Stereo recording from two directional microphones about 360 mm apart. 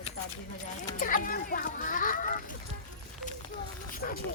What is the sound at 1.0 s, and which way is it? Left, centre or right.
Speech, left.